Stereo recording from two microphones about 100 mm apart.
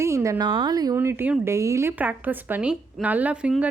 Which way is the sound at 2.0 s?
15° right (ahead or behind).